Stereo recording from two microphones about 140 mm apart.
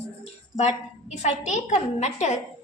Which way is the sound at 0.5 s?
55° left (ahead or behind).